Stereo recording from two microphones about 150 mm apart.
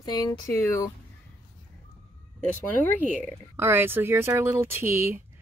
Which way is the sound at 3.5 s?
15° right (ahead or behind).